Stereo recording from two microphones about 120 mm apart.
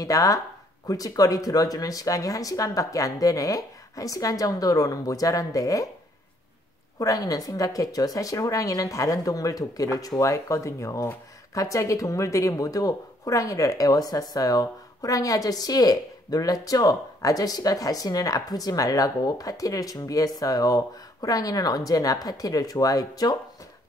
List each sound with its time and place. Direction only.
0.0 s speech: 30° left (ahead or behind)
7.0 s speech: 30° left (ahead or behind)